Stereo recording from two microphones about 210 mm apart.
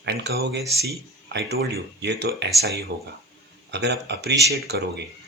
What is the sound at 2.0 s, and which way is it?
Speech, 55° right (ahead or behind).